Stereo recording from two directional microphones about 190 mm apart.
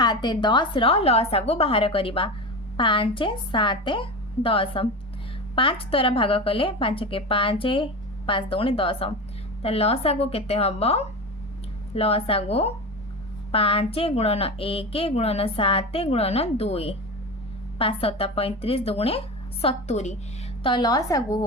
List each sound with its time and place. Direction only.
0.0 s a woman's voice: 20° left (ahead or behind)
20.7 s a woman's voice: 25° left (ahead or behind)